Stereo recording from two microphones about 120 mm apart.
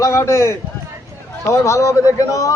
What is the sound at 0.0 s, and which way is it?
A man's voice, 20° left (ahead or behind).